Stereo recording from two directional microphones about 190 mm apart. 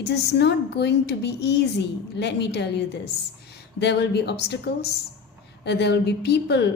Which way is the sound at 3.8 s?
60° left (ahead or behind).